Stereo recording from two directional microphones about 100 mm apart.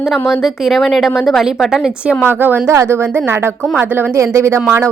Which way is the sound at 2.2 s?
20° right (ahead or behind).